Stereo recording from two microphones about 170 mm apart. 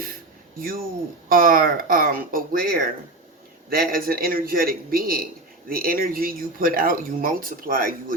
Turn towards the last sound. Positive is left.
turn(degrees=-55)  # may be behind; listen again after turning